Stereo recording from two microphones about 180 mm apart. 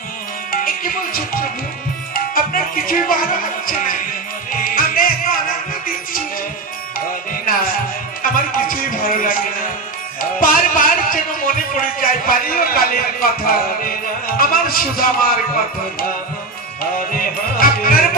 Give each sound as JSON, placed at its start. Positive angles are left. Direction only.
{"t": 0.5, "sound": "music", "side_deg": 50}
{"t": 8.2, "sound": "music", "side_deg": 50}
{"t": 10.4, "sound": "speech", "side_deg": 50}
{"t": 17.1, "sound": "music", "side_deg": 50}